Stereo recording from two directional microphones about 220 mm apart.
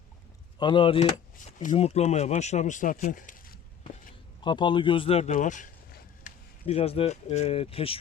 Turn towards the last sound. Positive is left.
turn(degrees=25)  # may be behind; listen again after turning